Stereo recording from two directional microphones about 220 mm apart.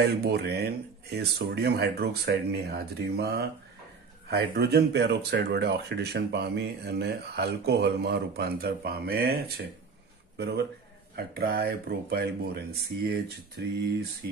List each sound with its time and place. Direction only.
0.0 s speech: 45° right (ahead or behind)
11.1 s speech: 45° right (ahead or behind)